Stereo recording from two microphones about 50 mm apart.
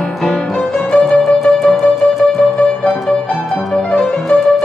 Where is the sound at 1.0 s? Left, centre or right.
Centre.